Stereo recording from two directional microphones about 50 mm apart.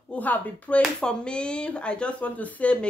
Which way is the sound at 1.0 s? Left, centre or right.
Centre.